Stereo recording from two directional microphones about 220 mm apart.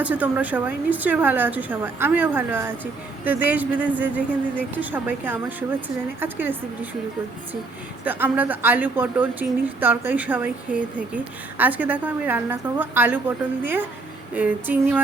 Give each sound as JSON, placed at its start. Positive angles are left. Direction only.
{"t": 0.0, "sound": "speech", "side_deg": -5}
{"t": 8.0, "sound": "speech", "side_deg": -10}